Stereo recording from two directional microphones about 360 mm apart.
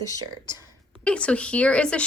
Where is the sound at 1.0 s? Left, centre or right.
Centre.